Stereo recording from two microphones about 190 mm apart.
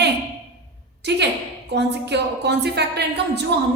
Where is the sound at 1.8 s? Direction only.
65° right (ahead or behind).